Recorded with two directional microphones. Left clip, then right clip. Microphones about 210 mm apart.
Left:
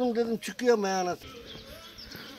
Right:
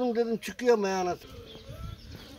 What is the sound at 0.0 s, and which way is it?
Speech, 45° right (ahead or behind).